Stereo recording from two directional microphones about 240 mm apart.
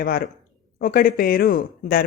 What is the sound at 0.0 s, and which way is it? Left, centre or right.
Speech, left.